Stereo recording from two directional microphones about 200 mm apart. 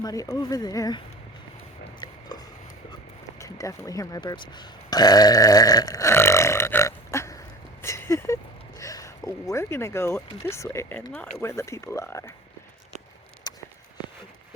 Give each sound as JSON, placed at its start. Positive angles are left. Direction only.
{"t": 0.0, "sound": "speech", "side_deg": 15}
{"t": 2.3, "sound": "a sound", "side_deg": 20}
{"t": 3.3, "sound": "speech", "side_deg": 15}
{"t": 13.5, "sound": "walk", "side_deg": 20}